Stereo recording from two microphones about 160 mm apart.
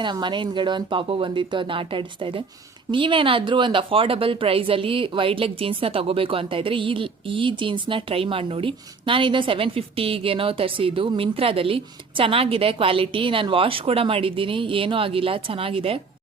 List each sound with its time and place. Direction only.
0.0 s speech: 30° right (ahead or behind)